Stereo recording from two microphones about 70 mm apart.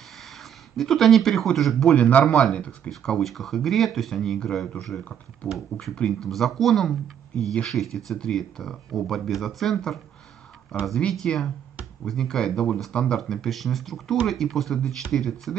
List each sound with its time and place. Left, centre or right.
0.7 s speech: centre
2.0 s speech: centre
2.2 s speech: centre
2.5 s speech: centre
2.9 s speech: centre
5.8 s speech: centre